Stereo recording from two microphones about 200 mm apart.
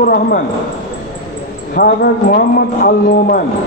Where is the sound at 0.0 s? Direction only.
45° left (ahead or behind).